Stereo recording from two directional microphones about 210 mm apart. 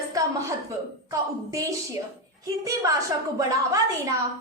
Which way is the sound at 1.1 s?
15° right (ahead or behind).